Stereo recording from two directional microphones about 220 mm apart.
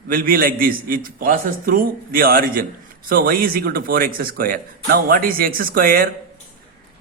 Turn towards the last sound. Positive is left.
turn(degrees=-40)  # may be behind; listen again after turning